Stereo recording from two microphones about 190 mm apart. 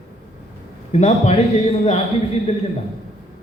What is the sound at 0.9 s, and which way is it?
A man's voice, 35° left (ahead or behind).